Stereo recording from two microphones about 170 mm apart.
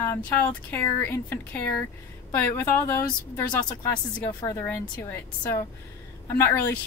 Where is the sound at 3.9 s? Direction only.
25° left (ahead or behind).